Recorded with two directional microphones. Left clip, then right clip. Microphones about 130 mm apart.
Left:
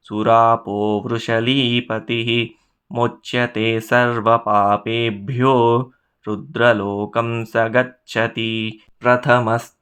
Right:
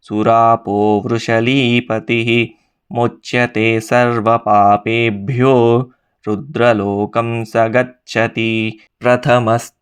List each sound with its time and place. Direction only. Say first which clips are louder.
0.0 s speech: right 2 dB; 30° right (ahead or behind)